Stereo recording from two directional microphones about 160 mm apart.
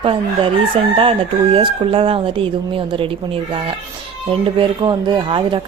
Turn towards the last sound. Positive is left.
turn(degrees=-30)  # may be behind; listen again after turning